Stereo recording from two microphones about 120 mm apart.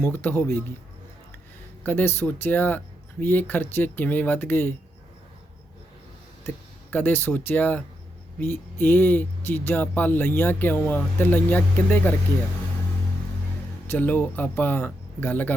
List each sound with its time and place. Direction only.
0.0 s speech: 20° left (ahead or behind)
1.8 s speech: 15° left (ahead or behind)
6.9 s speech: 15° left (ahead or behind)
13.8 s speech: 15° left (ahead or behind)